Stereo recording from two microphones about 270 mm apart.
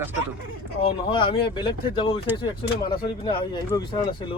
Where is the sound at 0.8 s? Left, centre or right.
Centre.